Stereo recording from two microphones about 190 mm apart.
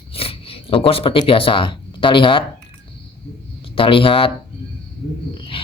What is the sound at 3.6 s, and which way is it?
Speech, 30° left (ahead or behind).